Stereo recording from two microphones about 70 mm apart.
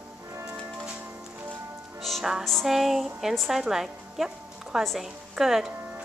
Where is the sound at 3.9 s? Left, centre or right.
Centre.